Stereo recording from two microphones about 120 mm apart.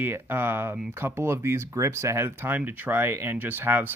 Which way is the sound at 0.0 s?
20° right (ahead or behind).